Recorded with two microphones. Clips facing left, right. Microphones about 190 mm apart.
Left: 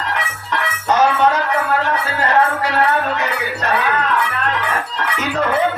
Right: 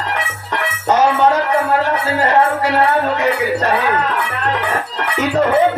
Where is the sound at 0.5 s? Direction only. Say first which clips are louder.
Right 2 dB; 25° right (ahead or behind).